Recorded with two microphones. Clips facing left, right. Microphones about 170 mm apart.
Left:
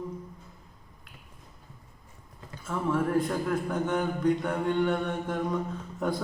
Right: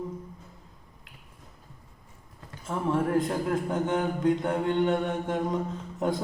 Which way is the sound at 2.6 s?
20° right (ahead or behind).